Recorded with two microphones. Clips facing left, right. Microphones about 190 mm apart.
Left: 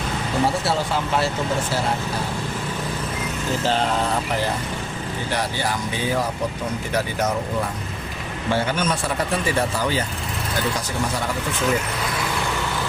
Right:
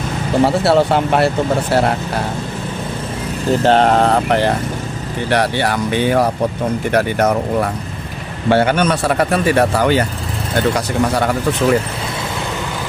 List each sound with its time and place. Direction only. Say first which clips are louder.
0.4 s speech: right 10 dB; 65° right (ahead or behind)
3.6 s speech: right 10 dB; 65° right (ahead or behind)